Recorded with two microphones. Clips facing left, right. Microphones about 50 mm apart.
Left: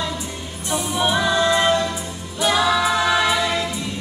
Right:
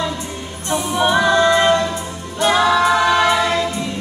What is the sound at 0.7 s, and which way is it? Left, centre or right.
Music, centre.